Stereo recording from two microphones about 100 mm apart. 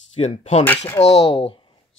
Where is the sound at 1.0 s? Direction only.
50° left (ahead or behind).